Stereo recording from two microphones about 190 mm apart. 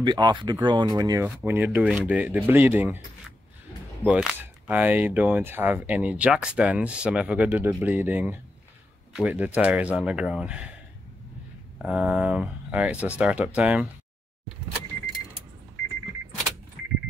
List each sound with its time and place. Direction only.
0.0 s speech: 25° right (ahead or behind)
1.2 s speech: 10° right (ahead or behind)
4.0 s speech: 5° right (ahead or behind)
11.8 s speech: 5° right (ahead or behind)